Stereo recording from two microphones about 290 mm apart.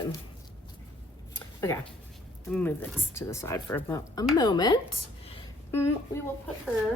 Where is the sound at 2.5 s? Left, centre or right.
Centre.